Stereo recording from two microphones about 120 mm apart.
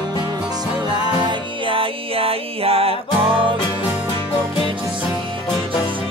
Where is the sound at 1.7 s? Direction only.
50° right (ahead or behind).